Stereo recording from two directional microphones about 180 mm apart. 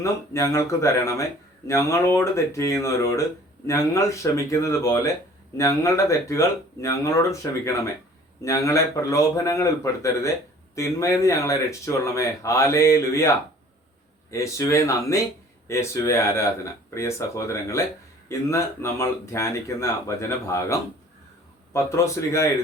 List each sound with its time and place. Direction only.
0.0 s speech: 15° left (ahead or behind)